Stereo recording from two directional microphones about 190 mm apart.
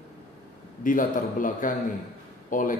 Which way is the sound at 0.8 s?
45° left (ahead or behind).